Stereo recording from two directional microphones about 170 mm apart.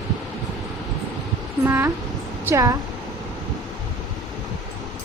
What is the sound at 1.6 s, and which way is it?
Speech, 15° right (ahead or behind).